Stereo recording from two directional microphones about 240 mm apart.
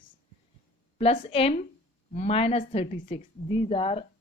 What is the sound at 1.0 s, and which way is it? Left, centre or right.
Speech, left.